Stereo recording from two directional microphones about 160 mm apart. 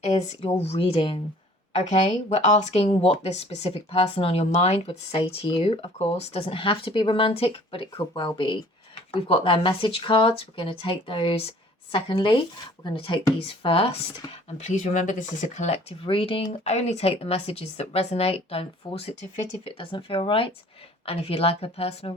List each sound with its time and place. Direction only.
0.0 s speech: 45° left (ahead or behind)
9.2 s speech: 35° left (ahead or behind)
14.6 s speech: 50° left (ahead or behind)